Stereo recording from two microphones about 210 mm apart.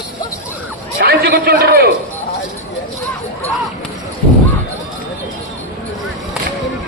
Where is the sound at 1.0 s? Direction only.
50° right (ahead or behind).